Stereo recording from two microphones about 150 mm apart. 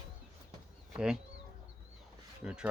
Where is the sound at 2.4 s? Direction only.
5° right (ahead or behind).